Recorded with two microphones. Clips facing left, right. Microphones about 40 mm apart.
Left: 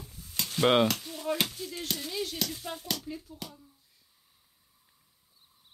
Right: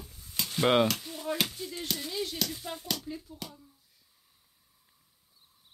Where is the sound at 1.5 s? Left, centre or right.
Centre.